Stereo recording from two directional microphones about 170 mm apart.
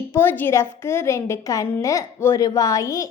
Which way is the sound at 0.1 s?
10° left (ahead or behind).